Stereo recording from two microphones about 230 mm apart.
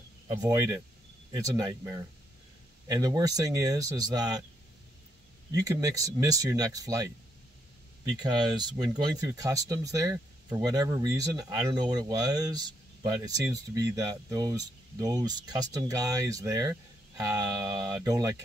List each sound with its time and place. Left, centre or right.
0.3 s speech: centre
5.5 s speech: centre
8.2 s speech: centre